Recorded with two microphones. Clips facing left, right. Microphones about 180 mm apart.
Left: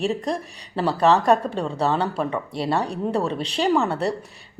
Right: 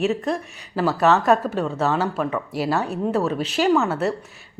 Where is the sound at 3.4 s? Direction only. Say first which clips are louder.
Right 2 dB; 30° left (ahead or behind).